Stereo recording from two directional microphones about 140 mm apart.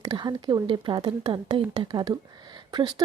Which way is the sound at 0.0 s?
30° right (ahead or behind).